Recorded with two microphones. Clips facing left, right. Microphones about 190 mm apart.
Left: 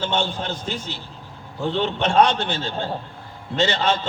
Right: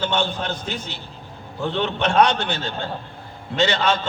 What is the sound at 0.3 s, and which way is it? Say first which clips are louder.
Speech: even; 60° right (ahead or behind).